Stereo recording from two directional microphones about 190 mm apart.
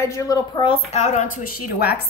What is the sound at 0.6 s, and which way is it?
A woman's voice, 30° left (ahead or behind).